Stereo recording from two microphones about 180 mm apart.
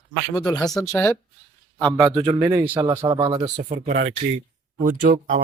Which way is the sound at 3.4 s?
40° right (ahead or behind).